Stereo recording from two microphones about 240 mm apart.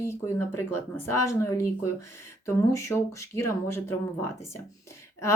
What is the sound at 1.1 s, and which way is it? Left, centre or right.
Speech, left.